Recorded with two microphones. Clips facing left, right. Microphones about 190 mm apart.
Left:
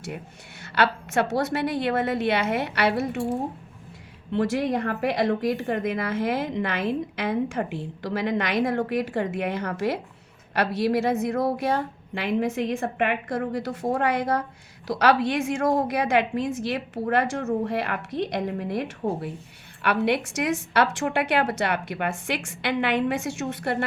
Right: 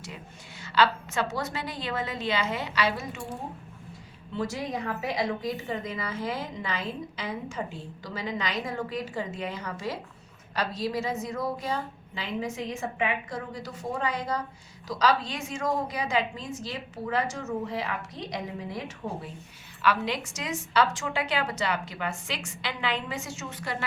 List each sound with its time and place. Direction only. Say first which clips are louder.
0.6 s a woman's voice: left 1 dB; 60° left (ahead or behind)
4.3 s a woman's voice: left 8 dB; 65° left (ahead or behind)